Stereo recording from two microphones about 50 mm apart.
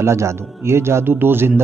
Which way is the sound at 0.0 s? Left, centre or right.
Right.